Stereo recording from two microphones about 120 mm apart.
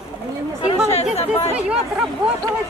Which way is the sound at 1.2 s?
60° left (ahead or behind).